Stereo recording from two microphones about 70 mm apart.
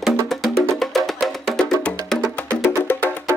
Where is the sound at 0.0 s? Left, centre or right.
Centre.